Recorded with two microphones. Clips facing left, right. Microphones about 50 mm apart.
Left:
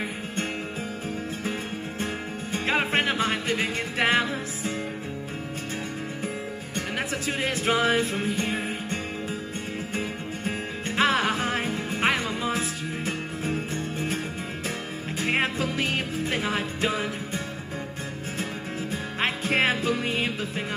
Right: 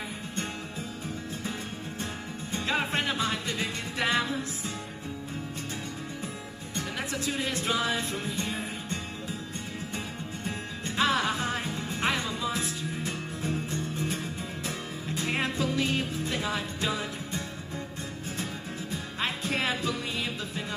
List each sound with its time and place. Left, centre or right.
1.4 s music: left
6.2 s music: left
11.0 s music: left
18.4 s music: left